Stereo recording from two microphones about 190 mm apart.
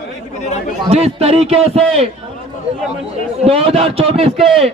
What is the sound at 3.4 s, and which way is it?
A man's voice, 30° right (ahead or behind).